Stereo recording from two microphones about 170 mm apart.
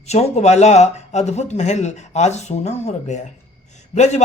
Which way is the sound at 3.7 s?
40° left (ahead or behind).